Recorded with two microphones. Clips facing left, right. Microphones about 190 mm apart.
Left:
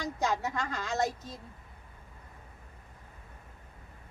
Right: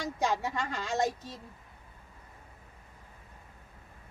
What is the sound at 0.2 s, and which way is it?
Speech, 15° right (ahead or behind).